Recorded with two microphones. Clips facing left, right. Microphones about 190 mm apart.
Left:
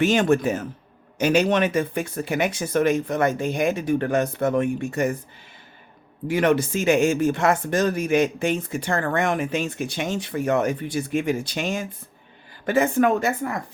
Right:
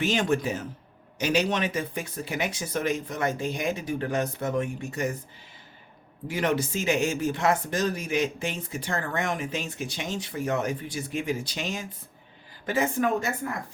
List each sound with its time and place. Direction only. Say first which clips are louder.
0.0 s speech: left 6 dB; 50° left (ahead or behind)
6.2 s speech: left 6 dB; 60° left (ahead or behind)